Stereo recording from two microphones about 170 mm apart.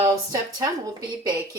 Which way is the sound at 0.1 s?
20° right (ahead or behind).